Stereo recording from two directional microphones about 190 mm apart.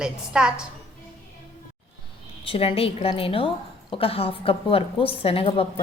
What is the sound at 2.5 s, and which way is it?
A woman's voice, 30° left (ahead or behind).